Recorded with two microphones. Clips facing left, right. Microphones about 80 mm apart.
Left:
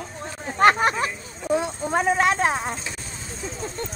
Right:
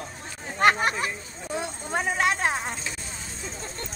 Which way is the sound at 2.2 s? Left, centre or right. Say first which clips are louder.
Left 4 dB; left.